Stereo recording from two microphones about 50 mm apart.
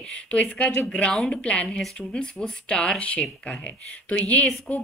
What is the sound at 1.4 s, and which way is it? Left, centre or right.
A woman's voice, left.